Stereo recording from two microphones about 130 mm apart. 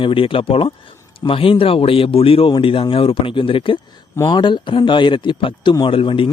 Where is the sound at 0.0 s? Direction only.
45° left (ahead or behind).